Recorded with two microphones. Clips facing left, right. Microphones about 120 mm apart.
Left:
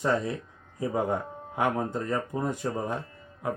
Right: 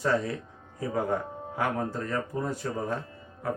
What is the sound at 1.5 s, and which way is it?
Speech, 20° left (ahead or behind).